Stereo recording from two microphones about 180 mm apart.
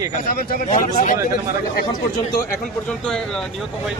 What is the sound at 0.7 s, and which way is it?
Speech, 45° left (ahead or behind).